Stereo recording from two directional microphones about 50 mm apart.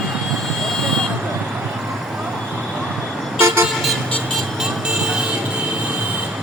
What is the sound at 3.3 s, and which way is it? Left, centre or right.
Vehicle, right.